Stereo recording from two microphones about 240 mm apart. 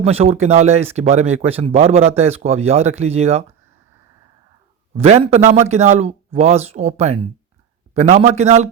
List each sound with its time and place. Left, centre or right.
0.0 s speech: right
4.9 s speech: right